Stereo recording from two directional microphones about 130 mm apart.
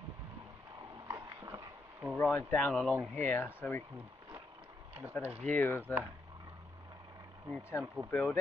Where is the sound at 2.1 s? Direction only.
15° left (ahead or behind).